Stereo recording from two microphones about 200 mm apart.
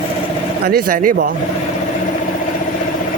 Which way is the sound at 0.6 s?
45° right (ahead or behind).